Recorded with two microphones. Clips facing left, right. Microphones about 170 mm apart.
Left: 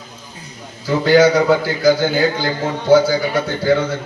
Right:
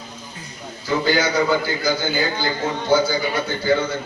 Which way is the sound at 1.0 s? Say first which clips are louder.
Left 9 dB; 85° left.